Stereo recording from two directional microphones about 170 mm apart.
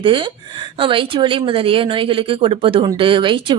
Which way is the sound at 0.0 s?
30° right (ahead or behind).